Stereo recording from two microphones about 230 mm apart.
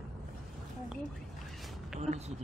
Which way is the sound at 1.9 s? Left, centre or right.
Right.